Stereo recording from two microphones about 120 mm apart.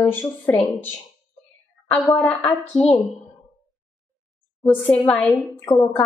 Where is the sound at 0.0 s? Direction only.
10° left (ahead or behind).